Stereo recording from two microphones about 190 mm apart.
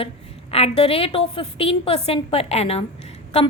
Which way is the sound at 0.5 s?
30° left (ahead or behind).